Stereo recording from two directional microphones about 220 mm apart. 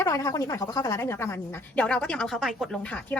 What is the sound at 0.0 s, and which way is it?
Speech, 15° left (ahead or behind).